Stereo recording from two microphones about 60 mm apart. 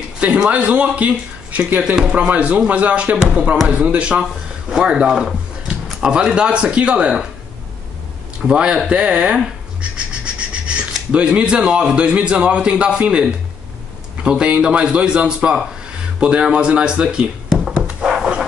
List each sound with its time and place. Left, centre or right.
0.5 s speech: right
8.5 s speech: centre
18.0 s a sound: centre